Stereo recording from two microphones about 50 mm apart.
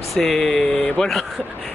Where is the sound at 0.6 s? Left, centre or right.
Left.